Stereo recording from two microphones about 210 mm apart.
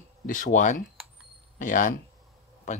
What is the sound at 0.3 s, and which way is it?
Speech, 40° left (ahead or behind).